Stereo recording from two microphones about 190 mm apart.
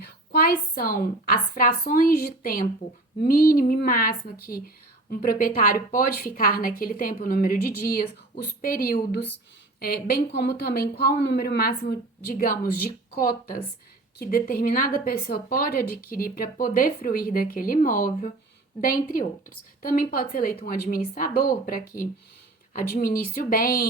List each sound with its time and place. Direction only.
0.0 s a woman's voice: 55° left (ahead or behind)